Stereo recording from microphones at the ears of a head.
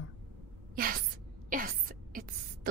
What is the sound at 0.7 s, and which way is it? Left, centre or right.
Speech, right.